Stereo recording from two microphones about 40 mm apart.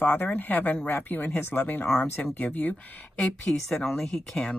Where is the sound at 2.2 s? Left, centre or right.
Left.